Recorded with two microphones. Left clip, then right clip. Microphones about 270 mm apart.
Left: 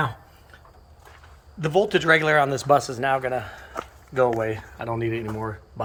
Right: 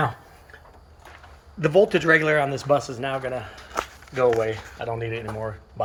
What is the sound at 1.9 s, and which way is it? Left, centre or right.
Speech, centre.